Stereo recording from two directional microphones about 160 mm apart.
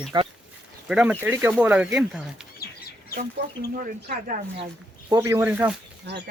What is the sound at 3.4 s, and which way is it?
Speech, 90° right.